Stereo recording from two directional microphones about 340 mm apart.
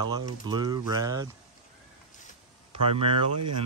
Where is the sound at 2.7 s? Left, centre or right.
Centre.